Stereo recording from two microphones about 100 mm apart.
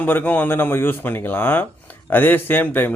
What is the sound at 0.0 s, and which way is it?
Speech, 15° left (ahead or behind).